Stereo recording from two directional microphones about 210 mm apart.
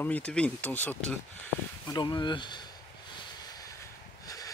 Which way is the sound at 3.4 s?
20° left (ahead or behind).